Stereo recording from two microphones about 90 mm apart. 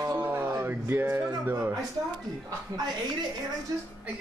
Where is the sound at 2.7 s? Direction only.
45° right (ahead or behind).